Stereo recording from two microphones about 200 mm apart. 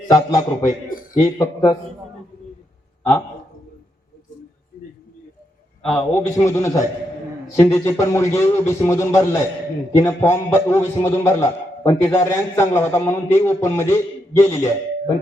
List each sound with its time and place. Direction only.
0.1 s a man's voice: 15° left (ahead or behind)
0.6 s a sound: 45° left (ahead or behind)
5.9 s a man's voice: 10° left (ahead or behind)